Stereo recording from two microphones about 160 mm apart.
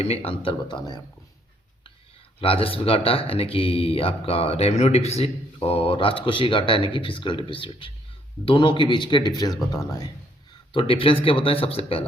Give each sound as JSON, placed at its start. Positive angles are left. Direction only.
{"t": 0.0, "sound": "speech", "side_deg": 40}
{"t": 2.4, "sound": "speech", "side_deg": 35}
{"t": 10.7, "sound": "speech", "side_deg": 35}